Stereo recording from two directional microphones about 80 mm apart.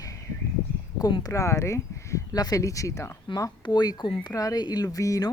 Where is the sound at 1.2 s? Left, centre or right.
Left.